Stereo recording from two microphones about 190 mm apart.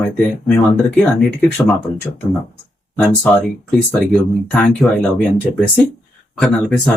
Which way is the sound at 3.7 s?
5° left (ahead or behind).